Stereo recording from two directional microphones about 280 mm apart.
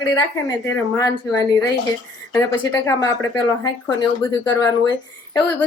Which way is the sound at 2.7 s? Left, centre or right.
Centre.